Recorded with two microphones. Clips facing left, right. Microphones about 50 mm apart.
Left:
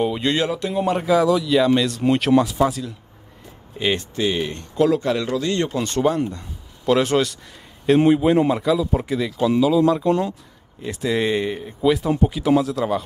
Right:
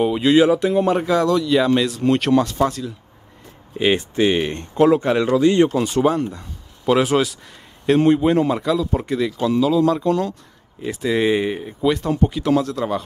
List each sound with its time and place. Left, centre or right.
0.0 s speech: centre
3.7 s speech: centre
4.2 s speech: right
5.7 s speech: centre
10.0 s speech: left
10.8 s speech: centre
11.8 s speech: centre